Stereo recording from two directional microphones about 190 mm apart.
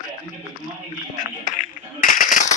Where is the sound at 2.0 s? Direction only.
45° left (ahead or behind).